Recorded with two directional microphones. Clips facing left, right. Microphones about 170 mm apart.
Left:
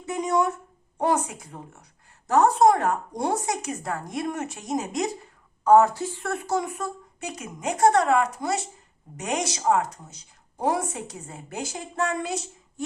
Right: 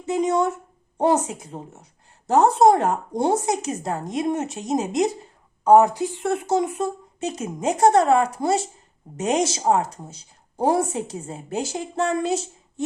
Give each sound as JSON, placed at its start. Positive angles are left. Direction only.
{"t": 0.0, "sound": "a woman's voice", "side_deg": -25}